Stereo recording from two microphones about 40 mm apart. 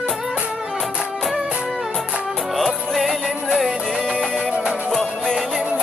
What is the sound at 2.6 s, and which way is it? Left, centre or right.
Music, centre.